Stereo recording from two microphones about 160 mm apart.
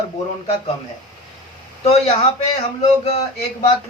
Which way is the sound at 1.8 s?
40° left (ahead or behind).